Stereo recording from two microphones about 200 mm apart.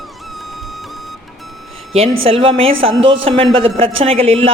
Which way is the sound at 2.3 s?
30° right (ahead or behind).